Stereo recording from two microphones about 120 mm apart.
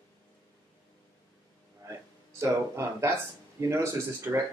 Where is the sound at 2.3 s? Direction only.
25° right (ahead or behind).